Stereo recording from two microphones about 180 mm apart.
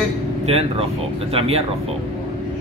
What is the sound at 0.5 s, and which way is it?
Speech, 35° right (ahead or behind).